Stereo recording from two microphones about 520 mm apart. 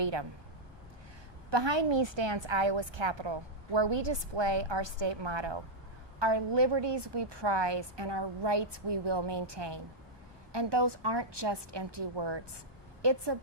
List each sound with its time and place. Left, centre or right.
0.0 s a woman's voice: right
1.5 s a woman's voice: right